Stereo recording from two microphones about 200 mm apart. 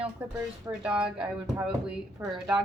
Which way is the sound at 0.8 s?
5° right (ahead or behind).